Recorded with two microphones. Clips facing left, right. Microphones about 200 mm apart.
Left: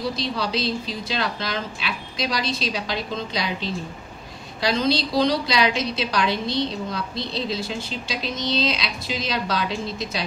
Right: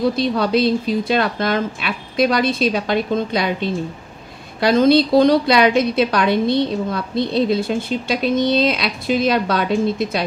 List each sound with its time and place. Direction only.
0.0 s a woman's voice: 55° right (ahead or behind)